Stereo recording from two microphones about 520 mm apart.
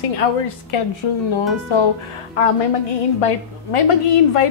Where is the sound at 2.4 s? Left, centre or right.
Left.